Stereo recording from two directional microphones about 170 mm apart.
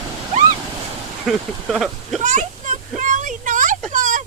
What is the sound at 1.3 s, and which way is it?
Speech, centre (ahead or behind).